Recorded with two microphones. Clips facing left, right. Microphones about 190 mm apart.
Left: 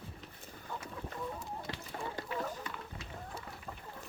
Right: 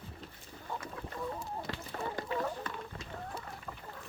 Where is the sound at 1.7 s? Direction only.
20° left (ahead or behind).